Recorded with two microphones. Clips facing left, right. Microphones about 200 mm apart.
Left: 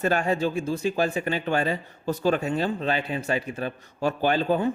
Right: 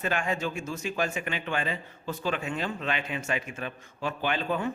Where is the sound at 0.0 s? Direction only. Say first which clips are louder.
Left 6 dB; 40° left (ahead or behind).